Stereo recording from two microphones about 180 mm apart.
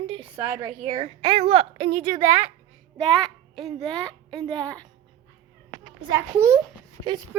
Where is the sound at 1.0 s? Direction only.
35° right (ahead or behind).